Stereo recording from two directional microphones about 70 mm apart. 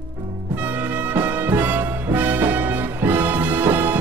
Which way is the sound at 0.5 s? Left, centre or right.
Right.